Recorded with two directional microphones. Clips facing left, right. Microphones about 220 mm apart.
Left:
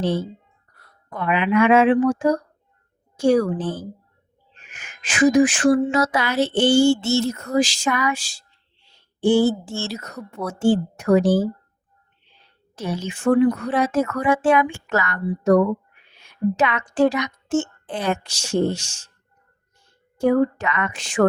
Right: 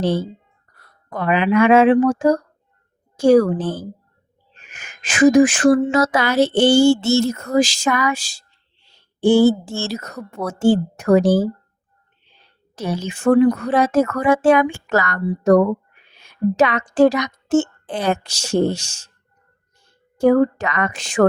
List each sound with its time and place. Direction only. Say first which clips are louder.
0.0 s a woman's voice: right 3 dB; 35° right (ahead or behind)
12.7 s a woman's voice: right 3 dB; 40° right (ahead or behind)
20.1 s a woman's voice: right 4 dB; 40° right (ahead or behind)